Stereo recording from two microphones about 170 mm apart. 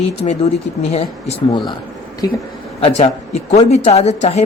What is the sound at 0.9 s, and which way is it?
Speech, 35° left (ahead or behind).